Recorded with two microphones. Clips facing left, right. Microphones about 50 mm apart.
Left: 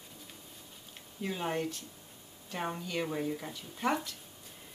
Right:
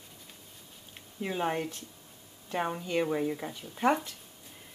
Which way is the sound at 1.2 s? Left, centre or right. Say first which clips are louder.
Right 3 dB; centre.